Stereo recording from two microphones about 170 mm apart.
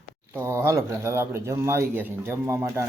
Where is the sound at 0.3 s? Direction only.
15° right (ahead or behind).